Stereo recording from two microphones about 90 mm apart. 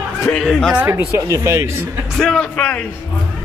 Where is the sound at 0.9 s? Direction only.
35° right (ahead or behind).